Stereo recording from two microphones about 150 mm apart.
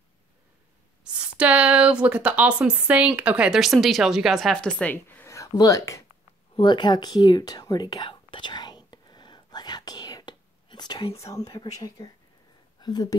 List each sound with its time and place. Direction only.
1.0 s a woman's voice: 5° right (ahead or behind); by 6.0 s 20° left (ahead or behind)
6.5 s whispering: 30° left (ahead or behind)
11.1 s speech: 20° left (ahead or behind)
11.4 s speech: 40° left (ahead or behind)
12.8 s speech: 25° left (ahead or behind)